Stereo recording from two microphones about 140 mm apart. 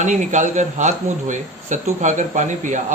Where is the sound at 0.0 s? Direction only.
60° right (ahead or behind).